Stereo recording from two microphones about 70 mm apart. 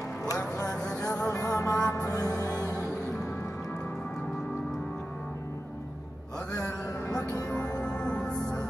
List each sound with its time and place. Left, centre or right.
0.3 s music: left
2.1 s music: left
7.4 s music: centre